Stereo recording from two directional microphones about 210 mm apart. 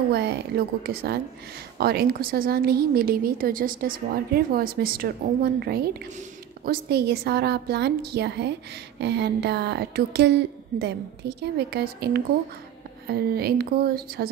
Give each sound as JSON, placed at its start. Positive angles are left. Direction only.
{"t": 0.1, "sound": "a woman's voice", "side_deg": -50}